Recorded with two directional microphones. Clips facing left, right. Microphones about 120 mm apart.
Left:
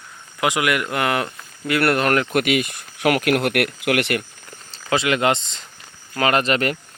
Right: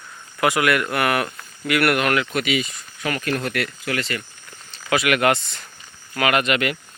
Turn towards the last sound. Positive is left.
turn(degrees=35)  # may be behind; listen again after turning